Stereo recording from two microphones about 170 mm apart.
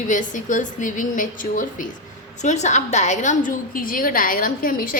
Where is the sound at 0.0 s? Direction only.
50° left (ahead or behind).